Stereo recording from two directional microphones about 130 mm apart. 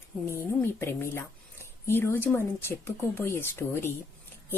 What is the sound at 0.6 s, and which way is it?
A woman's voice, 20° left (ahead or behind).